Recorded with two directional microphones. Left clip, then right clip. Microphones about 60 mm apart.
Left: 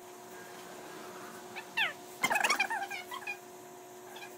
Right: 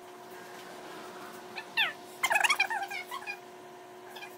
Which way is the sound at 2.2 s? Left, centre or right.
Centre.